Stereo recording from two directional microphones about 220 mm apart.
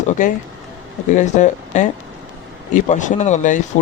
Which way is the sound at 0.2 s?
35° left (ahead or behind).